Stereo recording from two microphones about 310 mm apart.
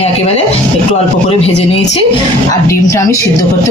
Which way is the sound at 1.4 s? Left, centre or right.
Centre.